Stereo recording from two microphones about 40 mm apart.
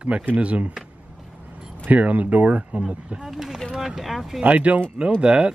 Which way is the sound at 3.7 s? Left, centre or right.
Centre.